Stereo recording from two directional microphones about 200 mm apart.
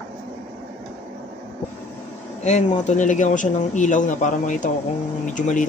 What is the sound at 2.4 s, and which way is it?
Speech, 35° left (ahead or behind).